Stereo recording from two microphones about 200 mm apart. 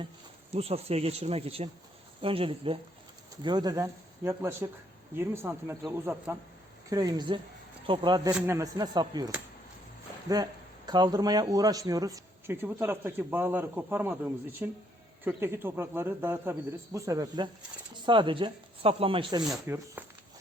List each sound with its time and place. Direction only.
0.5 s a man's voice: 30° right (ahead or behind)
8.3 s a man's voice: 10° right (ahead or behind); by 19.4 s 25° right (ahead or behind)
19.6 s a man's voice: 10° right (ahead or behind)